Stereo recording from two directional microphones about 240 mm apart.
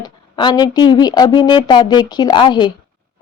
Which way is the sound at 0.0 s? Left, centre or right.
Centre.